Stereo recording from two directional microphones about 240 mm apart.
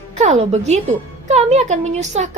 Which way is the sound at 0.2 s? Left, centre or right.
Right.